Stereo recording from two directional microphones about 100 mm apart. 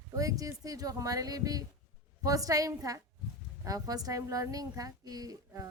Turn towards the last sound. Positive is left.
turn(degrees=-40)  # may be behind; listen again after turning